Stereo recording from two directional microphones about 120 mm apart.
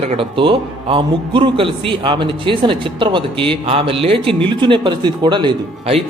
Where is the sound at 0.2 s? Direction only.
45° right (ahead or behind).